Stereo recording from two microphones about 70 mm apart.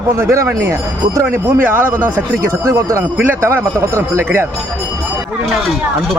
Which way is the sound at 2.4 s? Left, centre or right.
Right.